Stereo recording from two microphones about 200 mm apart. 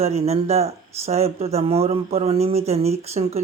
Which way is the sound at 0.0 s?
30° right (ahead or behind).